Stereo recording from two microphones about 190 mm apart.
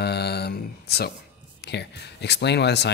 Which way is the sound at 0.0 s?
60° left (ahead or behind).